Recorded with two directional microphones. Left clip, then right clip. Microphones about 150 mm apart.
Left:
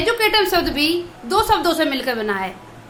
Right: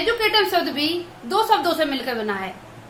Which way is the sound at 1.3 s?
35° left (ahead or behind).